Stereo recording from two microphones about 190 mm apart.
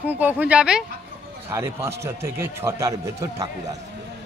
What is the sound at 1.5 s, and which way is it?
Speech, 15° right (ahead or behind).